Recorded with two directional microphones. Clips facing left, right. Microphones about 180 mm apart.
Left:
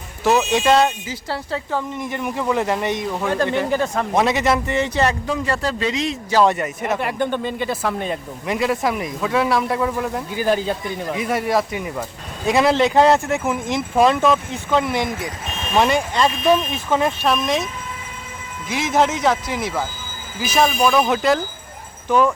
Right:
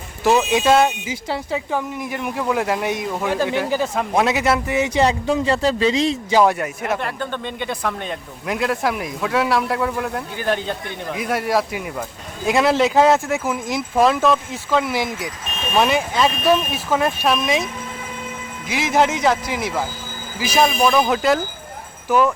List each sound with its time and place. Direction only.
0.3 s speech: 5° right (ahead or behind)
5.3 s a man's voice: 25° right (ahead or behind)
6.3 s speech: 5° right (ahead or behind)
7.0 s speech: 15° left (ahead or behind); by 17.7 s centre (ahead or behind)
18.7 s speech: centre (ahead or behind)